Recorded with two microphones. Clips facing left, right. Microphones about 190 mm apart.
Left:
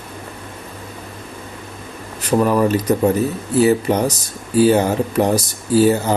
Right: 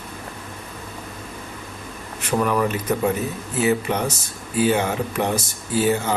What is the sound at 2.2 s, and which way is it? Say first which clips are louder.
Speech: left 5 dB; 35° left (ahead or behind).